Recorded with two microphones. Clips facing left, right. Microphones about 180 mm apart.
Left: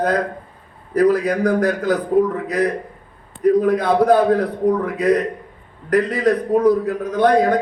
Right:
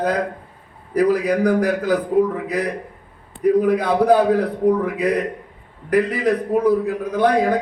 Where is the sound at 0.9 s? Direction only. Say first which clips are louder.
Left 1 dB; 10° right (ahead or behind).